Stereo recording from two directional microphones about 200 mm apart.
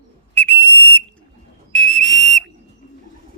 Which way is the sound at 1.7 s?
5° left (ahead or behind).